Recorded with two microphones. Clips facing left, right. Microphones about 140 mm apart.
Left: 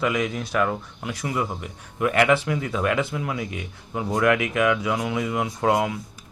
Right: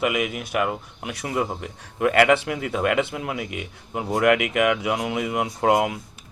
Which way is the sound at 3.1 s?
25° right (ahead or behind).